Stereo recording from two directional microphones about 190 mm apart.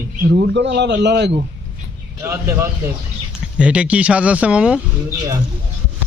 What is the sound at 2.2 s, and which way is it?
A man's voice, 15° right (ahead or behind).